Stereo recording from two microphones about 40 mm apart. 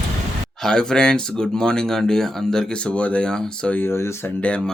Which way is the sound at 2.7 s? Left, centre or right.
Left.